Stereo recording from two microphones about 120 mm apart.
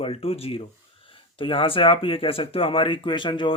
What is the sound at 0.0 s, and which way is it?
Speech, 50° left (ahead or behind).